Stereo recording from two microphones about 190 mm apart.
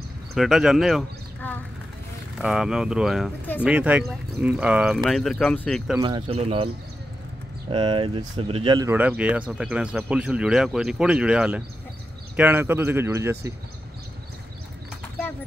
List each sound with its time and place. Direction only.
0.3 s speech: centre (ahead or behind)
2.3 s speech: centre (ahead or behind)
5.9 s speech: 25° right (ahead or behind)
7.7 s speech: 25° right (ahead or behind)
8.9 s speech: 10° right (ahead or behind)